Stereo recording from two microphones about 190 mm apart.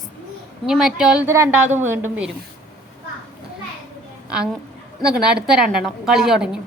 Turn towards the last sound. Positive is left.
turn(degrees=-5)  # may be behind; listen again after turning